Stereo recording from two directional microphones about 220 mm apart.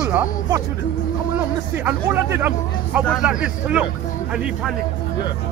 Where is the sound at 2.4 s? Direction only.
5° right (ahead or behind).